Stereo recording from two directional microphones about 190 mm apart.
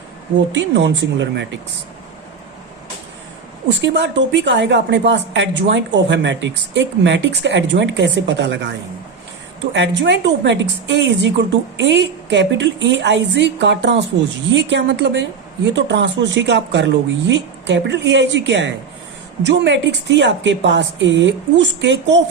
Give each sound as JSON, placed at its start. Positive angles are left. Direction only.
{"t": 0.5, "sound": "a woman's voice", "side_deg": -70}
{"t": 3.7, "sound": "a woman's voice", "side_deg": -70}
{"t": 9.7, "sound": "a woman's voice", "side_deg": -70}